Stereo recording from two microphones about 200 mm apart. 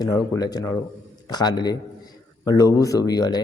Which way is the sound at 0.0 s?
20° left (ahead or behind).